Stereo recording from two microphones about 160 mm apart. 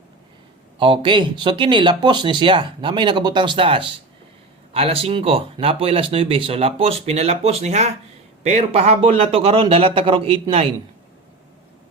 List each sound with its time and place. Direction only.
0.8 s speech: 30° right (ahead or behind)